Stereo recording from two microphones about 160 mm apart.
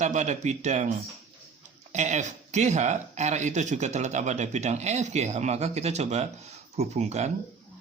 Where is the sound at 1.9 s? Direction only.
45° right (ahead or behind).